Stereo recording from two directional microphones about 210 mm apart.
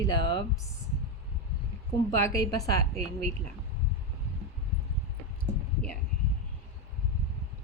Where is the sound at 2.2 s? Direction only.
15° left (ahead or behind).